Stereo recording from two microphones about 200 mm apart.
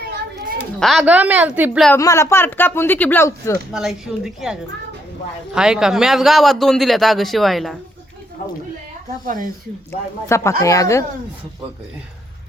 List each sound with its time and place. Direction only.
0.8 s a woman's voice: centre (ahead or behind)
1.9 s speech: 15° left (ahead or behind)
3.7 s a man's voice: centre (ahead or behind)
5.5 s a man's voice: 5° right (ahead or behind)
9.2 s speech: 40° right (ahead or behind)
10.2 s speech: 15° left (ahead or behind)